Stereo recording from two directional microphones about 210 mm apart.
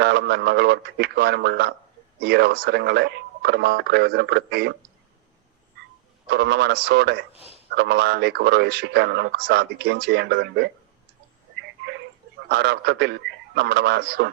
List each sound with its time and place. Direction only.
0.0 s a man's voice: 50° right (ahead or behind)
6.2 s a man's voice: 50° right (ahead or behind)
12.5 s a man's voice: 50° right (ahead or behind)